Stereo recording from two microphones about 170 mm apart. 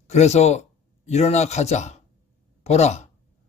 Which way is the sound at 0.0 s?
40° left (ahead or behind).